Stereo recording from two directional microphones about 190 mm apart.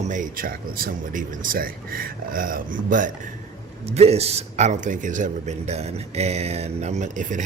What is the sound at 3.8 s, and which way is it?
A man's voice, 35° right (ahead or behind).